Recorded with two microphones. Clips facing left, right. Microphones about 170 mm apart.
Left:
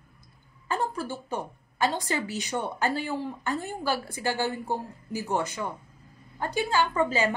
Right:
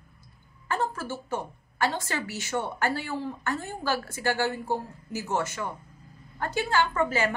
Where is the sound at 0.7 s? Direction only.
15° left (ahead or behind).